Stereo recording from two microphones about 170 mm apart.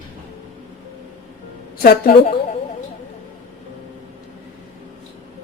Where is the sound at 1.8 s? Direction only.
60° left (ahead or behind).